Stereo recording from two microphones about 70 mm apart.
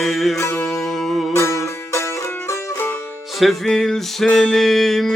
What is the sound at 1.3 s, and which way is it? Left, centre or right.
Music, left.